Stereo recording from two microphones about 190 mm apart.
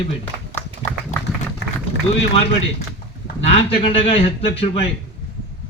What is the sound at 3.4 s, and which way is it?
A man's voice, 30° left (ahead or behind).